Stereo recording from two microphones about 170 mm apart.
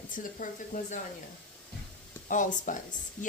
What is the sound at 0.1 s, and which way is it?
Speech, 50° left (ahead or behind).